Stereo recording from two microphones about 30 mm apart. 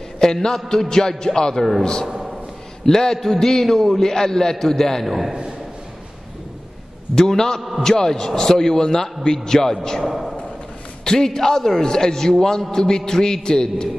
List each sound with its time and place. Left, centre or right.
0.2 s speech: left
2.8 s a man's voice: centre
5.0 s a man's voice: centre
7.2 s speech: centre
11.1 s speech: centre